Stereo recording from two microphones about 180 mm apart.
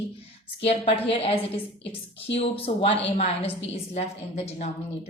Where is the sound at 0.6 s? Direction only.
35° left (ahead or behind).